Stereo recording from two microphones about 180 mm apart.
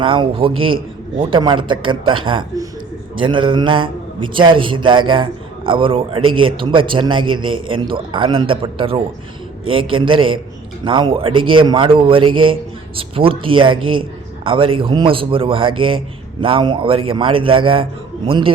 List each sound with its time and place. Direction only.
0.0 s a man's voice: 30° right (ahead or behind)